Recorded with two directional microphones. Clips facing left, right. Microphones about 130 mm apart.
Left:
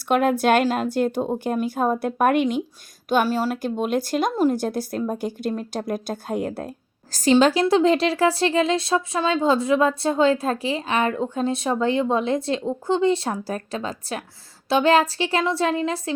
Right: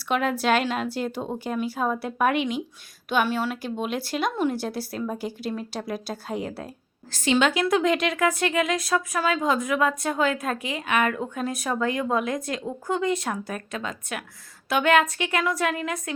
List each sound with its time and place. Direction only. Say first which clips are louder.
0.0 s a woman's voice: left 5 dB; 50° left (ahead or behind); by 16.1 s 30° left (ahead or behind)